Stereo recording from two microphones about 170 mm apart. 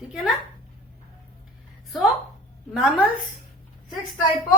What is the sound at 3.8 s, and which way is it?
Speech, 25° left (ahead or behind).